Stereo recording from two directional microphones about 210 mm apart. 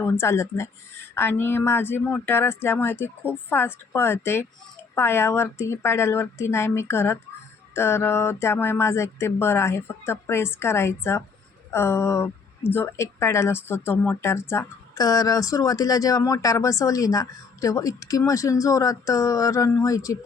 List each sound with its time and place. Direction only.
0.0 s a woman's voice: 10° left (ahead or behind)